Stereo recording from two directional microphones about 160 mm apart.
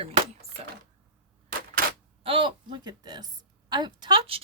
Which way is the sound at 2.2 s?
30° right (ahead or behind).